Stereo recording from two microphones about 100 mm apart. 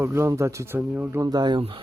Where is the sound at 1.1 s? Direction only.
40° right (ahead or behind).